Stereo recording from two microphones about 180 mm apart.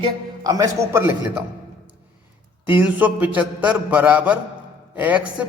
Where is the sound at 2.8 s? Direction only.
10° right (ahead or behind).